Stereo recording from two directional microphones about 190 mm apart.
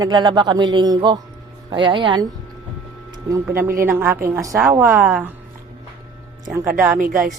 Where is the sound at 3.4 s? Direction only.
10° right (ahead or behind).